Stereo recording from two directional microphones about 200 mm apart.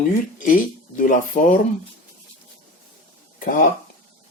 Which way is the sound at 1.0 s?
40° left (ahead or behind).